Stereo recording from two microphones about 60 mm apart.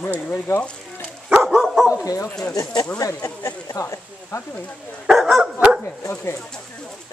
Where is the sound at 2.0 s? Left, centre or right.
Left.